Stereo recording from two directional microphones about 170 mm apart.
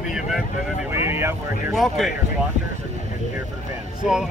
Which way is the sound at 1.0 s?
15° right (ahead or behind).